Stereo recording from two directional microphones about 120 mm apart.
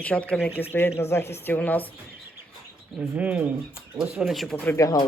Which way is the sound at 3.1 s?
15° right (ahead or behind).